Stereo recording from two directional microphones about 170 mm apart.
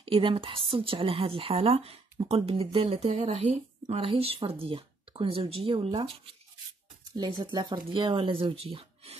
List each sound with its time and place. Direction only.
0.0 s speech: 30° right (ahead or behind)